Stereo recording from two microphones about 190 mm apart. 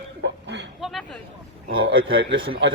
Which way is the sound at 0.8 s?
Centre (ahead or behind).